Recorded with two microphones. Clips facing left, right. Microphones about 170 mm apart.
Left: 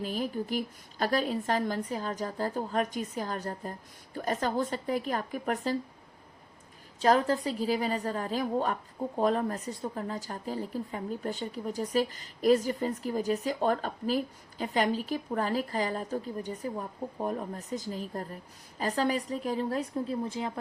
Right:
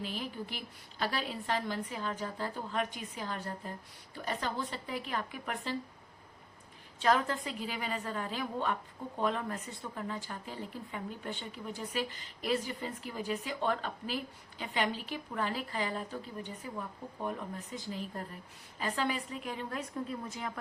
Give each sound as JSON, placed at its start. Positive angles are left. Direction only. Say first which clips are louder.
{"t": 0.0, "sound": "a woman's voice", "louder": "left 7 dB", "side_deg": 40}
{"t": 7.0, "sound": "a woman's voice", "louder": "left 5 dB", "side_deg": 35}